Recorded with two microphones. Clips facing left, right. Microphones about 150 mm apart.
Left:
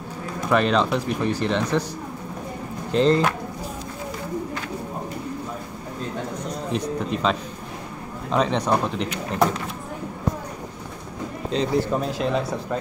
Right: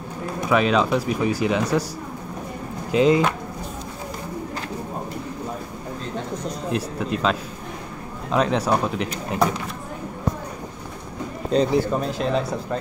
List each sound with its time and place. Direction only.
0.5 s speech: 5° right (ahead or behind)
2.9 s speech: 10° right (ahead or behind)
6.7 s speech: 5° right (ahead or behind)
11.5 s a man's voice: 40° right (ahead or behind)
11.9 s speech: centre (ahead or behind)